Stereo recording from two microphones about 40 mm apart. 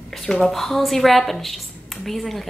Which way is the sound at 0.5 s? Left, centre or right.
Centre.